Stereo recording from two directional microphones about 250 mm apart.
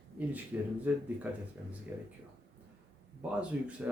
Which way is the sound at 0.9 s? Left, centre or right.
Centre.